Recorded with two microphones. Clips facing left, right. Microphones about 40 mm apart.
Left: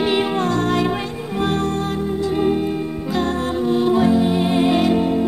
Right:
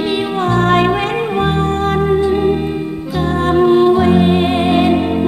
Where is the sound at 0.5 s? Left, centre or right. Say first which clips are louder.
Right 6 dB; right.